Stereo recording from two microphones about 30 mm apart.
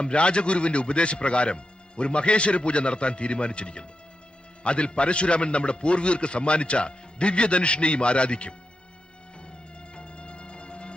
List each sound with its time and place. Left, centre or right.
0.0 s a man's voice: left
9.9 s music: left